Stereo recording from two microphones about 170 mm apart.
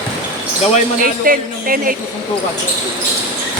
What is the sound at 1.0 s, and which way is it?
Speech, 55° right (ahead or behind).